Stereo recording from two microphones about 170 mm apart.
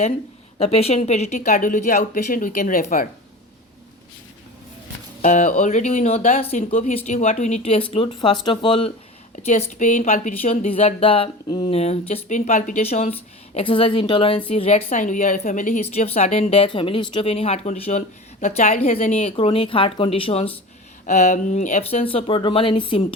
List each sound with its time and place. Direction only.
0.6 s speech: 35° left (ahead or behind); by 3.1 s 55° left (ahead or behind)
5.2 s speech: 45° left (ahead or behind); by 8.9 s 30° left (ahead or behind)
9.5 s speech: 45° left (ahead or behind)
21.1 s speech: 45° left (ahead or behind)